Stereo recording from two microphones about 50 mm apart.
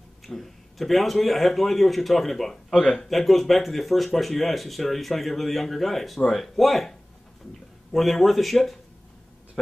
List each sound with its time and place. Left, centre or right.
0.2 s speech: centre
2.8 s speech: centre
3.1 s speech: centre